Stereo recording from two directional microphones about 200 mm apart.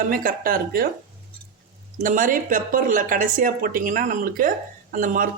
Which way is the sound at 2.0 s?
40° right (ahead or behind).